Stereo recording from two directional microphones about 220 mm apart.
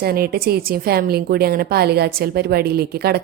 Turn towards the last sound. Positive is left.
turn(degrees=-45)  # may be behind; listen again after turning